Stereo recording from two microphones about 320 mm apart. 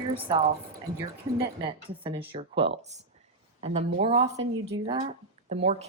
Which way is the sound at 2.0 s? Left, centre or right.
Centre.